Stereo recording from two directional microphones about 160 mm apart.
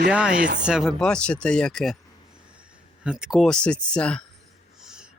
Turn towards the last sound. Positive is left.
turn(degrees=-5)  # may be behind; listen again after turning